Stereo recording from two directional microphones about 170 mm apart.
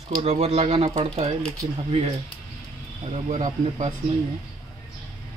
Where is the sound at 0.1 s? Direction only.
35° right (ahead or behind).